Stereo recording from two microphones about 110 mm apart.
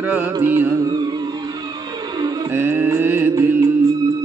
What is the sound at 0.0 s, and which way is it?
Music, 15° right (ahead or behind).